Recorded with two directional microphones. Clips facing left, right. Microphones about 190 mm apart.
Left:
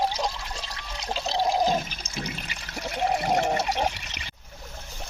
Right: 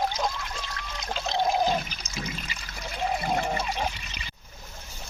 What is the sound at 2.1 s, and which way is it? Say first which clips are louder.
Water: left 1 dB; 60° left (ahead or behind).